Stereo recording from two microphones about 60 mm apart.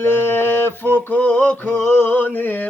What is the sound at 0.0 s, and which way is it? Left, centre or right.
Speech, left.